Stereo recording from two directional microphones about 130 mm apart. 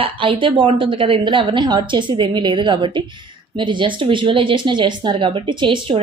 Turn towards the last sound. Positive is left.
turn(degrees=-40)  # may be behind; listen again after turning